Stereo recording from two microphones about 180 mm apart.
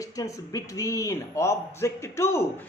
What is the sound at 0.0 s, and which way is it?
Speech, 20° left (ahead or behind).